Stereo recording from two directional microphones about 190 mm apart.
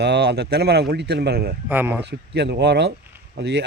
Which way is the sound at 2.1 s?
60° right (ahead or behind).